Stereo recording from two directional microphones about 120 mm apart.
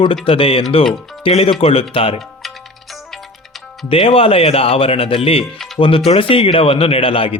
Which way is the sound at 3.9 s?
50° left (ahead or behind).